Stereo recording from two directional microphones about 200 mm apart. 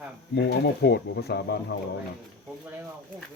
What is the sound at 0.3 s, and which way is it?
Speech, 55° left (ahead or behind).